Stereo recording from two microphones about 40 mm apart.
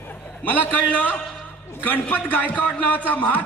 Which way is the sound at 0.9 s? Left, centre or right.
Left.